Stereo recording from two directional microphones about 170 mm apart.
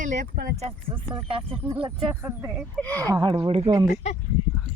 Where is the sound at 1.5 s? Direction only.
15° right (ahead or behind).